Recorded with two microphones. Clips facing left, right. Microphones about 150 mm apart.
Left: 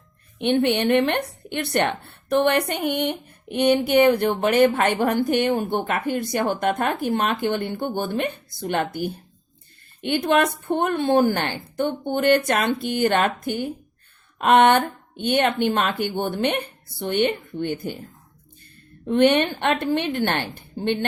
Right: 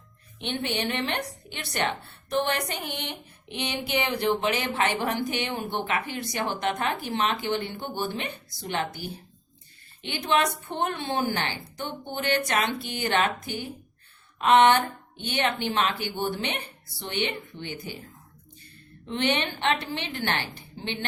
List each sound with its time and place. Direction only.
0.3 s a woman's voice: 55° left (ahead or behind)
19.0 s a woman's voice: 50° left (ahead or behind)